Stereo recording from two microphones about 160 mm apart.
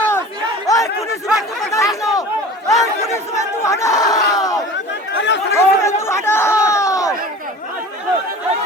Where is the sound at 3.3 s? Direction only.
20° left (ahead or behind).